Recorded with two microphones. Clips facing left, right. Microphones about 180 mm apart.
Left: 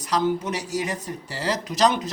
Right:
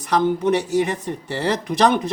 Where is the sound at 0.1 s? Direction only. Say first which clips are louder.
Right 5 dB; 55° right (ahead or behind).